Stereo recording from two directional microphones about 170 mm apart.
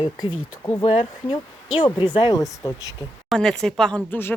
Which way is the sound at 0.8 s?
35° left (ahead or behind).